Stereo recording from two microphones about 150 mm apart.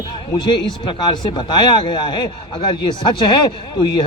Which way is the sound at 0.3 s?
30° left (ahead or behind).